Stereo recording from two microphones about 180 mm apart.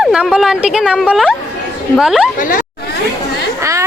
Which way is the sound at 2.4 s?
50° left (ahead or behind).